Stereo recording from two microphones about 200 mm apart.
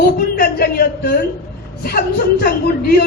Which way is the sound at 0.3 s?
50° left (ahead or behind).